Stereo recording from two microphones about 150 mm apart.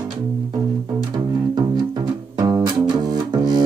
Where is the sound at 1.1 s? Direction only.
30° right (ahead or behind).